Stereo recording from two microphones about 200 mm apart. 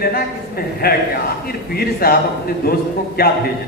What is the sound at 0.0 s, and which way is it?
A man's voice, 50° left (ahead or behind).